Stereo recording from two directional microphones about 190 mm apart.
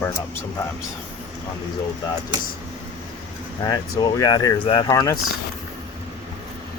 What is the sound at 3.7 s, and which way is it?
Speech, 20° left (ahead or behind).